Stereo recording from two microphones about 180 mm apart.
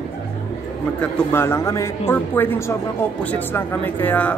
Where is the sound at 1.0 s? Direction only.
10° left (ahead or behind).